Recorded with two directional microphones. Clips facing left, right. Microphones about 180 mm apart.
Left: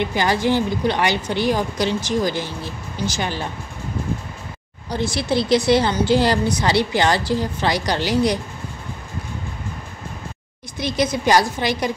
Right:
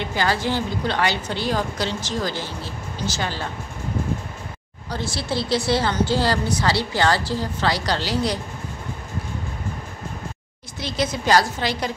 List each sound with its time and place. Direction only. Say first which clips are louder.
0.0 s a woman's voice: left 3 dB; 15° left (ahead or behind)
4.9 s a woman's voice: left 5 dB; 15° left (ahead or behind)
10.8 s a woman's voice: left 4 dB; 15° left (ahead or behind)